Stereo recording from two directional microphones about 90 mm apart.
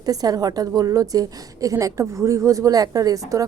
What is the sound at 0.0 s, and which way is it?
A woman's voice, 45° right (ahead or behind).